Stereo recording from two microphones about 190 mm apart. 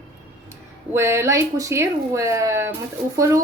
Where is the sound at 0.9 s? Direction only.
15° right (ahead or behind).